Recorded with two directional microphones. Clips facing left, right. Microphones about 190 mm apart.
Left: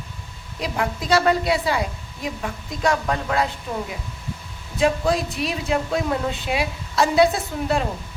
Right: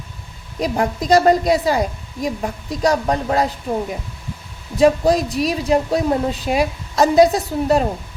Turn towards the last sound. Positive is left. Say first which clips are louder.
# right 6 dB
turn(degrees=-40)  # may be behind; listen again after turning